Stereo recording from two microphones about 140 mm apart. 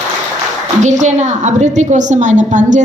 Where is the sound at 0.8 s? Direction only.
60° right (ahead or behind).